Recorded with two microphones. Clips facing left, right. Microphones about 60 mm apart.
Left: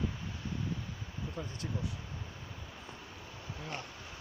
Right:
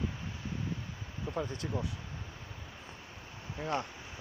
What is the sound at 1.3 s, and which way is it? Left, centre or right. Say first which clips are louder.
Speech: right 8 dB; right.